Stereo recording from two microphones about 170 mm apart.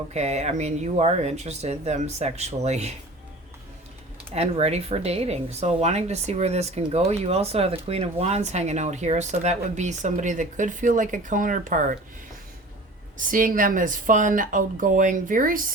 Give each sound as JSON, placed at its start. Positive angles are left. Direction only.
{"t": 0.1, "sound": "speech", "side_deg": -40}
{"t": 4.4, "sound": "speech", "side_deg": -40}
{"t": 13.1, "sound": "a woman's voice", "side_deg": -50}